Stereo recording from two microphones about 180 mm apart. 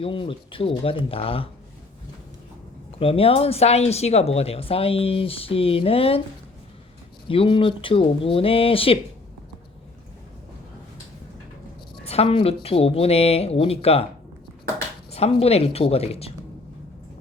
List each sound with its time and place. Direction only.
0.0 s speech: 30° left (ahead or behind)
3.0 s speech: 30° left (ahead or behind)
7.3 s speech: 30° left (ahead or behind)
12.0 s a woman's voice: 35° left (ahead or behind)
15.1 s speech: 35° left (ahead or behind)